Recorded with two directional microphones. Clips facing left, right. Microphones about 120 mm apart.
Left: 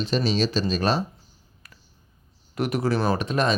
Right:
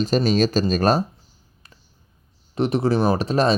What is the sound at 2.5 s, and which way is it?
Speech, 25° right (ahead or behind).